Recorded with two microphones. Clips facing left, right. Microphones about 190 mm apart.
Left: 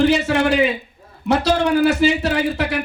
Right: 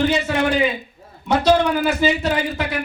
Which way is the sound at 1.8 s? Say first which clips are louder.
Left 2 dB; 70° left (ahead or behind).